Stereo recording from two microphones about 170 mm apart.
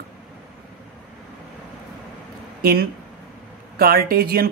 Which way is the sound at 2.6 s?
65° right (ahead or behind).